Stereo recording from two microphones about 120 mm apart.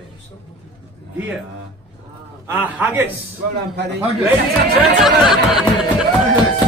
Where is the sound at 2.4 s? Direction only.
15° right (ahead or behind).